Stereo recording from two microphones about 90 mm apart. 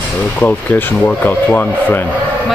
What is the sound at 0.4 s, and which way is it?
Speech, 20° left (ahead or behind).